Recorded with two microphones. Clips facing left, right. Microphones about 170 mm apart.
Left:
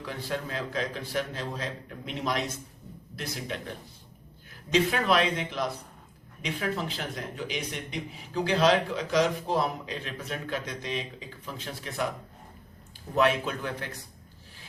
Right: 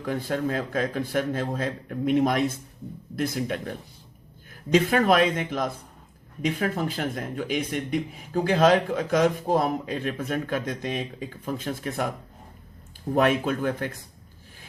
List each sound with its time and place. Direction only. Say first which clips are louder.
0.0 s a man's voice: right 7 dB; 50° right (ahead or behind)
13.1 s a man's voice: right 3 dB; 50° right (ahead or behind)